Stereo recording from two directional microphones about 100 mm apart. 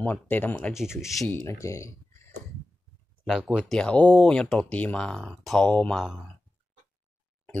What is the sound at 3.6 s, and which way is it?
Speech, 10° left (ahead or behind).